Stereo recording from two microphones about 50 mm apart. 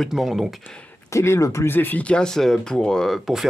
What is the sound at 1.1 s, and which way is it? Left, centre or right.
Speech, left.